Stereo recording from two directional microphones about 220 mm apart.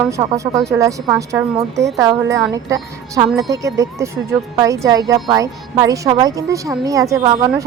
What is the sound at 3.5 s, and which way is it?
Speech, 15° right (ahead or behind).